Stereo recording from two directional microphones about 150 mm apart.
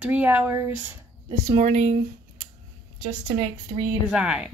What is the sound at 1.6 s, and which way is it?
Speech, 50° right (ahead or behind).